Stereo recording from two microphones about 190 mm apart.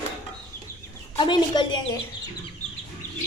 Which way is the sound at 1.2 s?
25° left (ahead or behind).